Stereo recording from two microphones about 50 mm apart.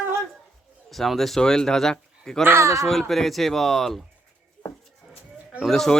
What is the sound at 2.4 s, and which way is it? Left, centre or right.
Speech, right.